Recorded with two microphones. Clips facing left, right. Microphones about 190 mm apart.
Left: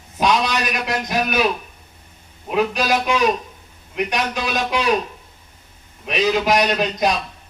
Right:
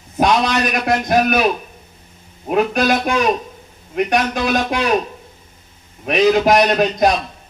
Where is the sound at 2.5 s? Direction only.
50° right (ahead or behind).